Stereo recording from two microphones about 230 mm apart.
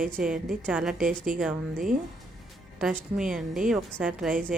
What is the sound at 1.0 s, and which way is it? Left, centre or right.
Speech, right.